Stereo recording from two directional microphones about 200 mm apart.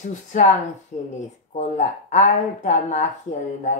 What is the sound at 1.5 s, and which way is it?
Speech, 35° left (ahead or behind).